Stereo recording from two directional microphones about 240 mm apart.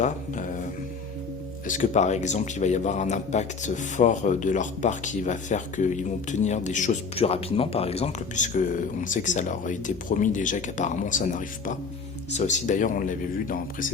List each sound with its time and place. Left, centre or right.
0.0 s mantra: left
1.6 s speech: left